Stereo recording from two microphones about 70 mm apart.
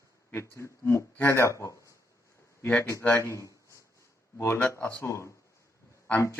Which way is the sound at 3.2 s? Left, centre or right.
Left.